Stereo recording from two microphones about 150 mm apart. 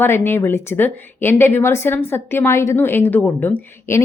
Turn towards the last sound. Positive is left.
turn(degrees=15)  # may be behind; listen again after turning